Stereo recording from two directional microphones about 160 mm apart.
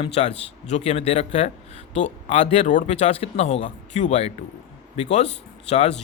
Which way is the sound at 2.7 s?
50° left (ahead or behind).